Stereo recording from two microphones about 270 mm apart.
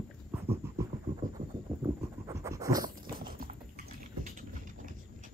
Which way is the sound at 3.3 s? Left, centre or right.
Right.